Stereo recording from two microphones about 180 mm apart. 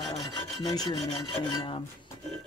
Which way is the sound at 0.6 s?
20° left (ahead or behind).